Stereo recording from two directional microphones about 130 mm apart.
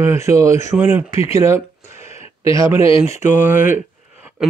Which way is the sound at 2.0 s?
55° left (ahead or behind).